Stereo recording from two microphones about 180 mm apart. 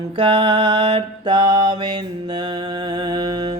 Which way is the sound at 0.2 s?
25° right (ahead or behind).